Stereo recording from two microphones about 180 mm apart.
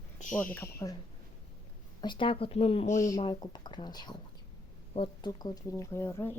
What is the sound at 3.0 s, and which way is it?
Speech, 25° left (ahead or behind).